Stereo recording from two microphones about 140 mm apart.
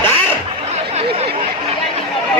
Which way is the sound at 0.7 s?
50° right (ahead or behind).